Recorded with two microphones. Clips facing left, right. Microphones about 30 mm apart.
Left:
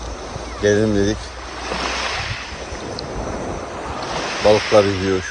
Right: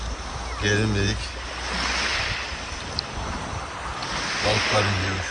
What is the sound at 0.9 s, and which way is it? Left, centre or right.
Speech, right.